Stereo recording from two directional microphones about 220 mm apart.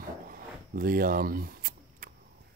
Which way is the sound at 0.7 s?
40° right (ahead or behind).